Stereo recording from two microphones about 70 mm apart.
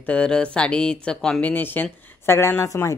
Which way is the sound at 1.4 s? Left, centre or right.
Left.